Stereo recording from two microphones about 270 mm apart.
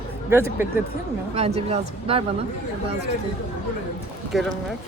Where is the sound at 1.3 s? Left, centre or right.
Right.